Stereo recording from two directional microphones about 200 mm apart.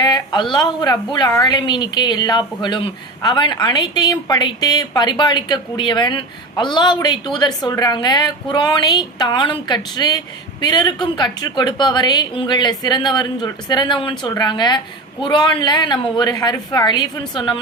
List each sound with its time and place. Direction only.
0.0 s a woman's voice: 20° left (ahead or behind)